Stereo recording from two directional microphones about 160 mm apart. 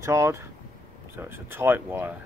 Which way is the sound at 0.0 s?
20° right (ahead or behind).